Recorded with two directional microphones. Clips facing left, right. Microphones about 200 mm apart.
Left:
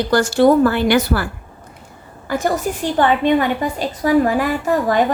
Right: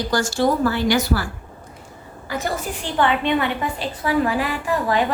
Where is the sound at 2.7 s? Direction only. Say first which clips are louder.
Left 3 dB; 45° left (ahead or behind).